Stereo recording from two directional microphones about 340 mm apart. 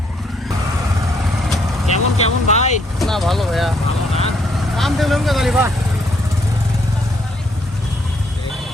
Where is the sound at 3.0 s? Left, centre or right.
Centre.